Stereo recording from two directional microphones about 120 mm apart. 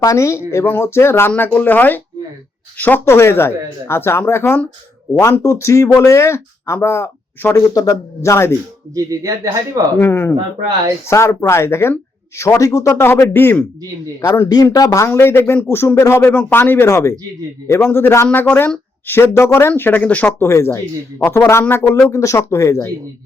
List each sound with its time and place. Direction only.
0.0 s speech: 25° left (ahead or behind)
9.0 s speech: 30° right (ahead or behind)
10.0 s speech: 20° left (ahead or behind)